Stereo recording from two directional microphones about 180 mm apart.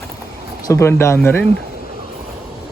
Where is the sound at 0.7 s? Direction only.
15° left (ahead or behind).